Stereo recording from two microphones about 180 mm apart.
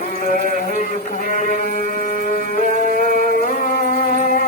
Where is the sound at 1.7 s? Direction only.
45° left (ahead or behind).